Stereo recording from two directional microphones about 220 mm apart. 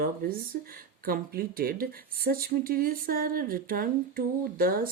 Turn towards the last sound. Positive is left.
turn(degrees=-40)  # may be behind; listen again after turning